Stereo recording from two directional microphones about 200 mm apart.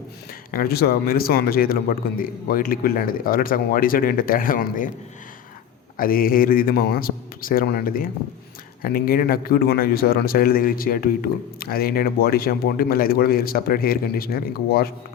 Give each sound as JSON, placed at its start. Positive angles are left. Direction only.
{"t": 0.5, "sound": "a man's voice", "side_deg": 50}
{"t": 6.0, "sound": "a man's voice", "side_deg": 45}